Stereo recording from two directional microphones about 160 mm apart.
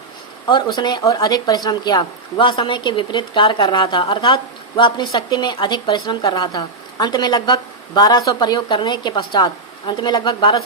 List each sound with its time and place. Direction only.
0.4 s a woman's voice: 30° left (ahead or behind)